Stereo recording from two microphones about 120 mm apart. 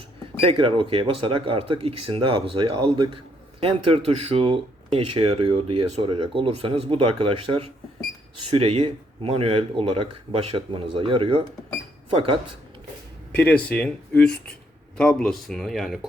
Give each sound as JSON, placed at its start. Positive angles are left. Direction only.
{"t": 0.3, "sound": "speech", "side_deg": -45}
{"t": 13.3, "sound": "speech", "side_deg": 10}